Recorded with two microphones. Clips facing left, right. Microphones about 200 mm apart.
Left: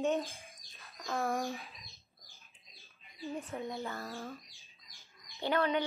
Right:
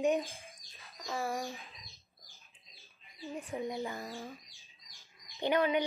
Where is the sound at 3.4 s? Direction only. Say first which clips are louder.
Right 2 dB; 15° right (ahead or behind).